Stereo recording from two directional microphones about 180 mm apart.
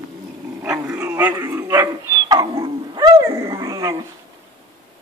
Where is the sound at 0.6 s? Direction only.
15° right (ahead or behind).